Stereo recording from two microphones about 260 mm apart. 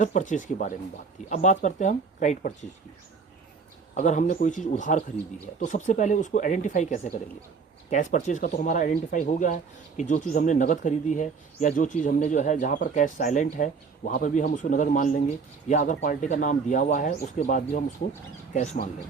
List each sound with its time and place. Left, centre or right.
0.0 s speech: left
3.9 s speech: left